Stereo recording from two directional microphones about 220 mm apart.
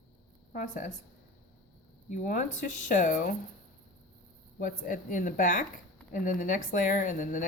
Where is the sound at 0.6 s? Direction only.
35° left (ahead or behind).